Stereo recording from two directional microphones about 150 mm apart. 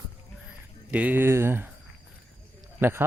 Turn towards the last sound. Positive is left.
turn(degrees=-15)  # may be behind; listen again after turning